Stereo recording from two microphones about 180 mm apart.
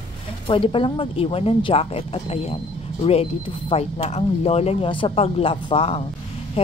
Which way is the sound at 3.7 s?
35° left (ahead or behind).